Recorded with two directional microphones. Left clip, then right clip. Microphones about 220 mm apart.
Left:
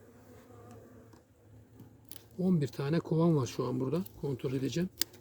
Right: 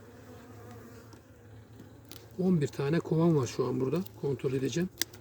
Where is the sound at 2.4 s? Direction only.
10° left (ahead or behind).